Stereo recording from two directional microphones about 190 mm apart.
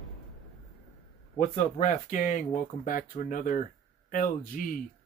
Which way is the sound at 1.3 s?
40° left (ahead or behind).